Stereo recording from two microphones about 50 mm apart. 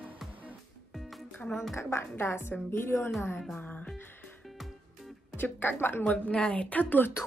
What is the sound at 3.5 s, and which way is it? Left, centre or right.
Music, left.